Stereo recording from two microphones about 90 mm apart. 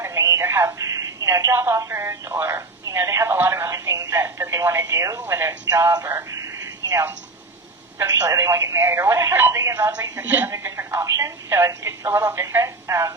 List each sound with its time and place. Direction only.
0.0 s telephone: 35° right (ahead or behind)
1.5 s speech: 30° right (ahead or behind)
2.8 s speech: 35° right (ahead or behind)
4.1 s speech: 25° right (ahead or behind)
6.3 s a sound: 40° right (ahead or behind)
7.9 s speech: 35° right (ahead or behind)